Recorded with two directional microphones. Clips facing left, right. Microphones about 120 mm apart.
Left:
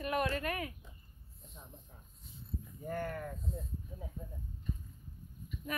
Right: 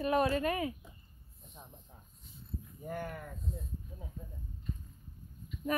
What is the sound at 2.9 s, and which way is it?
Speech, 15° right (ahead or behind).